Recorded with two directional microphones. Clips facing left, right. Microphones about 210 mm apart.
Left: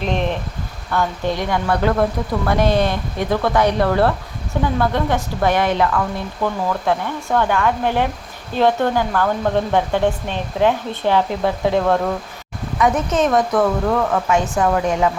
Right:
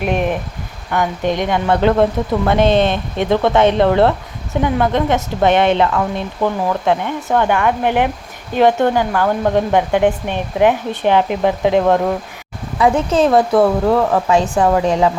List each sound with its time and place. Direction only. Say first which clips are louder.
0.0 s a sound: right 3 dB; 10° right (ahead or behind)
0.9 s a woman's voice: right 3 dB; 20° right (ahead or behind)
12.8 s speech: right 4 dB; 30° right (ahead or behind)